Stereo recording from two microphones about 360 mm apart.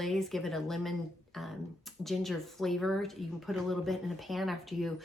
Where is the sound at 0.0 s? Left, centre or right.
Centre.